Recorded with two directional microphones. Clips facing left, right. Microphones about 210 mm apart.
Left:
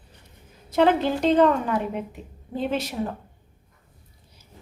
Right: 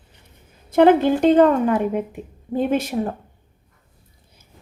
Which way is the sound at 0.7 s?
55° right (ahead or behind).